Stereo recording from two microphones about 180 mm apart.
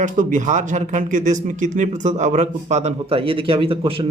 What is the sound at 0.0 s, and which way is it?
A man's voice, 45° right (ahead or behind).